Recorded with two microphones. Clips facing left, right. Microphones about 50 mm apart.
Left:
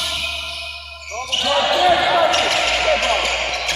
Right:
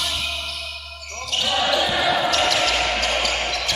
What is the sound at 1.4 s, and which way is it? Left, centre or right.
Basketball bounce, left.